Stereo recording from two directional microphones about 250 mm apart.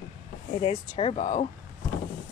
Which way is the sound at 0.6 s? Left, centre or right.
Left.